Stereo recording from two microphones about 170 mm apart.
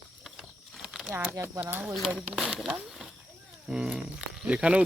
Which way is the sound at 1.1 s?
15° right (ahead or behind).